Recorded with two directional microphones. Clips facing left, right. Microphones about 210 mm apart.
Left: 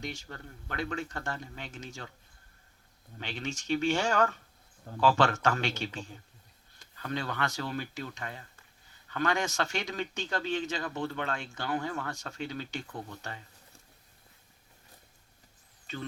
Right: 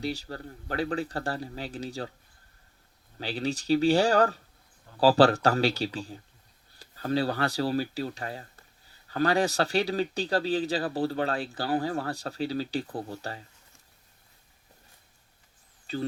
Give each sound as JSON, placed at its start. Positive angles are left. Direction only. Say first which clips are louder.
{"t": 0.0, "sound": "speech", "louder": "right 7 dB", "side_deg": -35}
{"t": 3.2, "sound": "speech", "louder": "right 7 dB", "side_deg": -35}
{"t": 15.9, "sound": "speech", "louder": "right 7 dB", "side_deg": -35}